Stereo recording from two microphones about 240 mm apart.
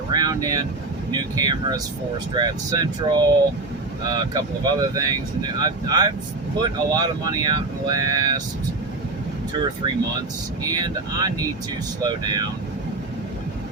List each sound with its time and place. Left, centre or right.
0.1 s speech: centre
10.7 s speech: centre